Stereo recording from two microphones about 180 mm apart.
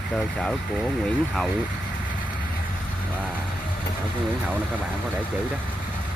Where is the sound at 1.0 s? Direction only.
Centre (ahead or behind).